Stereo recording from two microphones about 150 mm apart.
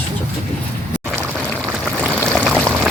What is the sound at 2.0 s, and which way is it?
Stream, 5° left (ahead or behind).